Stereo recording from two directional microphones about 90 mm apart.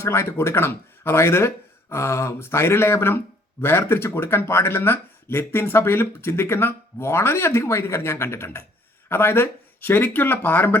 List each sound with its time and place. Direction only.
0.0 s speech: 30° left (ahead or behind)